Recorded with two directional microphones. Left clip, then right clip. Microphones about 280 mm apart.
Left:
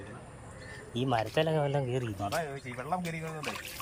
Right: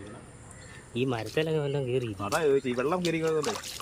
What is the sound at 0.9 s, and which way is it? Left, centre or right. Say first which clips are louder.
Speech: even; centre.